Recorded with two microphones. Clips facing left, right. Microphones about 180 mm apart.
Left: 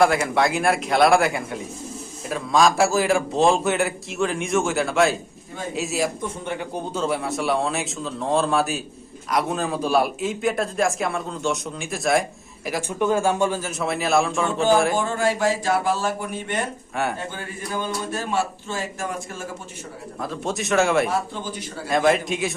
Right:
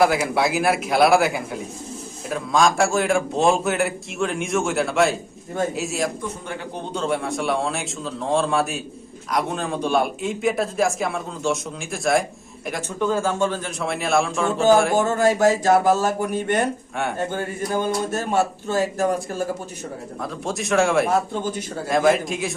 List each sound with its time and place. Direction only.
0.0 s a man's voice: 5° right (ahead or behind)
13.0 s a man's voice: 15° left (ahead or behind); by 14.5 s centre (ahead or behind)
14.9 s a man's voice: 45° right (ahead or behind)
20.2 s a man's voice: centre (ahead or behind)